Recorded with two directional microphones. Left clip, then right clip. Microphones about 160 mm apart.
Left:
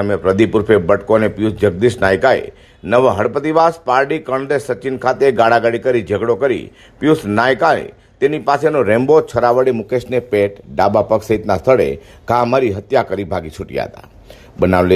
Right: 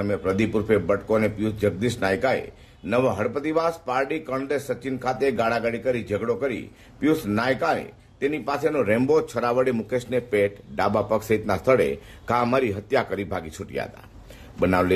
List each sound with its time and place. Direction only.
0.0 s speech: 35° left (ahead or behind)